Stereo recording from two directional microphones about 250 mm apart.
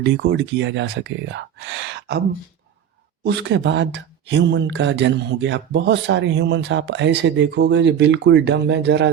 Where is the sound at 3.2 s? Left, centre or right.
Right.